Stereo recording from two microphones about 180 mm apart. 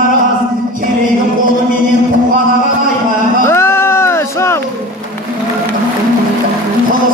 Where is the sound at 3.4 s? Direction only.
15° left (ahead or behind).